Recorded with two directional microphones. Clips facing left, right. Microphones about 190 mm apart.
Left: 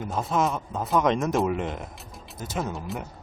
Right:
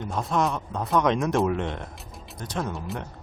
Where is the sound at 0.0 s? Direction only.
Centre (ahead or behind).